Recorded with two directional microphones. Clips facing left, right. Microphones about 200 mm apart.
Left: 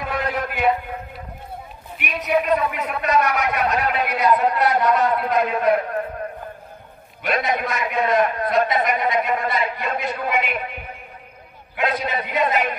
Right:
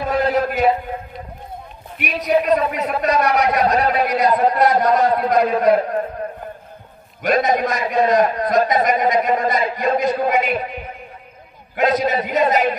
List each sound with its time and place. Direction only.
0.0 s a sound: 35° right (ahead or behind)
2.0 s a man's voice: 35° right (ahead or behind)
7.2 s a man's voice: 40° right (ahead or behind)
11.7 s a man's voice: 40° right (ahead or behind)